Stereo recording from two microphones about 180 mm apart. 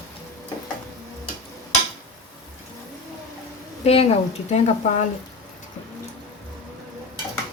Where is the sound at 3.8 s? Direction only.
35° left (ahead or behind).